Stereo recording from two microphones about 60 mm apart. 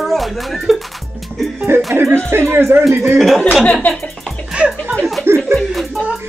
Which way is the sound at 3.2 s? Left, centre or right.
Centre.